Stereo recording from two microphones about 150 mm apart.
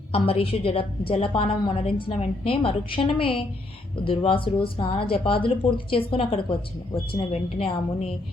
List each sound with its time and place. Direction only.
0.1 s a woman's voice: 40° left (ahead or behind)